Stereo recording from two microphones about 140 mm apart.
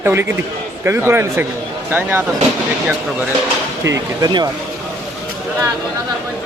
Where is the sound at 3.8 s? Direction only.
25° right (ahead or behind).